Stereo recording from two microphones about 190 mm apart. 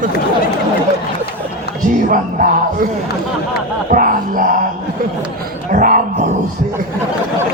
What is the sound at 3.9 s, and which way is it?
Speech, 45° right (ahead or behind).